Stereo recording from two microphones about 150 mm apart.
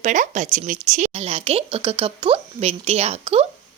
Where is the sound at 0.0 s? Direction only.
55° right (ahead or behind).